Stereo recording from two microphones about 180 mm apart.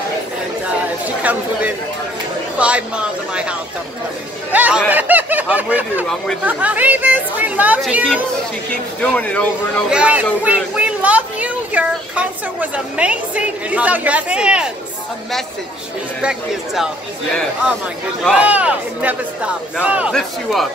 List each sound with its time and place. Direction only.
2.6 s speech: 5° right (ahead or behind)
9.8 s speech: 5° right (ahead or behind)
16.2 s speech: 5° right (ahead or behind)
18.2 s speech: 5° right (ahead or behind)